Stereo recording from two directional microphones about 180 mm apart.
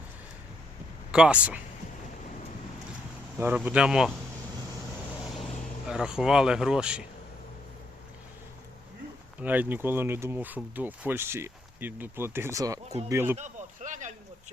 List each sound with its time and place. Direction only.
1.1 s speech: 5° right (ahead or behind)
3.3 s speech: 10° right (ahead or behind)
5.9 s speech: 5° right (ahead or behind)
9.4 s speech: 10° right (ahead or behind)
13.3 s a sound: 40° right (ahead or behind)